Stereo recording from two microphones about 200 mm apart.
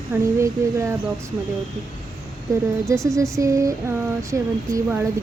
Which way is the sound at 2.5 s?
15° right (ahead or behind).